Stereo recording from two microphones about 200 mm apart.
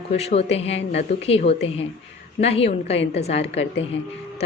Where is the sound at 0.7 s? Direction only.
65° left (ahead or behind).